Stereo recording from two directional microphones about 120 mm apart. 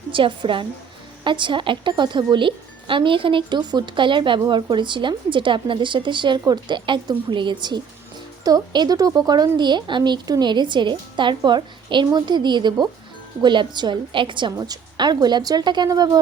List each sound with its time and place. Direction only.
0.1 s speech: 45° right (ahead or behind)